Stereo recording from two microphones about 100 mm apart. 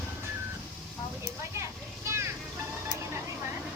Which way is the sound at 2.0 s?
25° right (ahead or behind).